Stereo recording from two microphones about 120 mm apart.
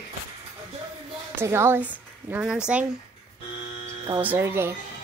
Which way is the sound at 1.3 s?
20° right (ahead or behind).